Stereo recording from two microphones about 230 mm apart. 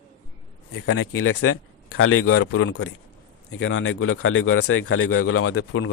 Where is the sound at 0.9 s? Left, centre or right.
Left.